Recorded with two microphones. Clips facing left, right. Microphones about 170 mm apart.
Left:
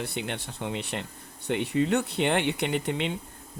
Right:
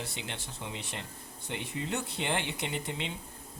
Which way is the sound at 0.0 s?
60° left (ahead or behind).